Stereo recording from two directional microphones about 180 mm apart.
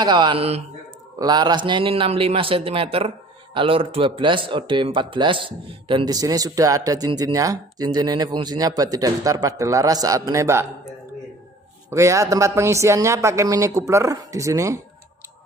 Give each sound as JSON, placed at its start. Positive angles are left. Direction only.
{"t": 0.0, "sound": "a man's voice", "side_deg": -25}
{"t": 11.9, "sound": "speech", "side_deg": -15}